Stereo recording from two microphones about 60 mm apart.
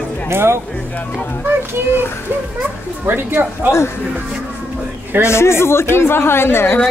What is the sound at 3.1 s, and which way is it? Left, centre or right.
Speech, right.